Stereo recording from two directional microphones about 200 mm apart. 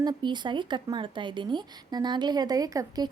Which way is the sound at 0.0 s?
20° right (ahead or behind).